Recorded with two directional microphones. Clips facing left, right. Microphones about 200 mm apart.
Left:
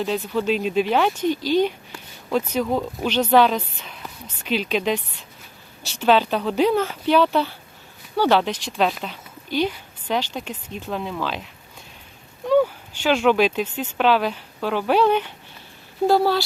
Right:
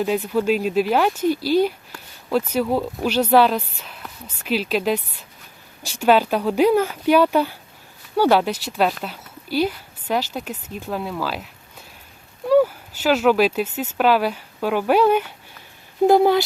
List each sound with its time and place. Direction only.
0.0 s speech: 10° right (ahead or behind)
1.9 s a sound: 5° left (ahead or behind)
2.5 s speech: 5° right (ahead or behind)
12.5 s speech: 5° right (ahead or behind)